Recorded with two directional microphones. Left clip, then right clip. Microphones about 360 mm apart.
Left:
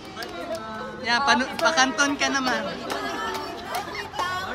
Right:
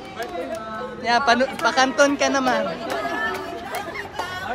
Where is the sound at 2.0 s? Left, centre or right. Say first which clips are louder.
Right 5 dB; centre.